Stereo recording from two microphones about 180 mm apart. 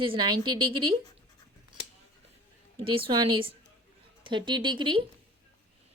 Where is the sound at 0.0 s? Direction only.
25° right (ahead or behind).